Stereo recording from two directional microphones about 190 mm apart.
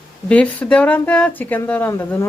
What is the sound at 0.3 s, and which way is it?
A woman's voice, 5° left (ahead or behind).